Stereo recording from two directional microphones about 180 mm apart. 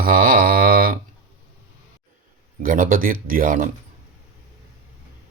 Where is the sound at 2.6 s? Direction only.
50° right (ahead or behind).